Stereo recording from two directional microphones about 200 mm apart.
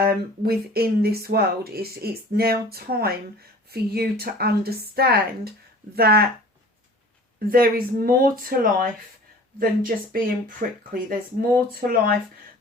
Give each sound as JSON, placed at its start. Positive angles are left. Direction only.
{"t": 0.0, "sound": "speech", "side_deg": -50}
{"t": 7.3, "sound": "speech", "side_deg": -45}